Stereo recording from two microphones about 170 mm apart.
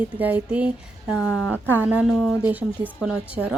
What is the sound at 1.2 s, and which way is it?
Speech, 15° left (ahead or behind).